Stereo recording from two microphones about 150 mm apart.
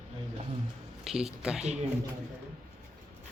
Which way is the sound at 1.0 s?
5° right (ahead or behind).